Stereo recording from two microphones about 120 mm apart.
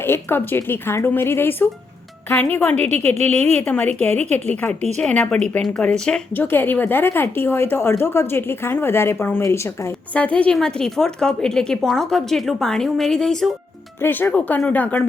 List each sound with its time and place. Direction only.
0.0 s a woman's voice: 20° left (ahead or behind)
2.8 s speech: 65° right (ahead or behind)
3.6 s a woman's voice: 15° left (ahead or behind)
6.3 s speech: 15° left (ahead or behind)
10.2 s a woman's voice: 10° left (ahead or behind)
14.0 s a woman's voice: 15° left (ahead or behind)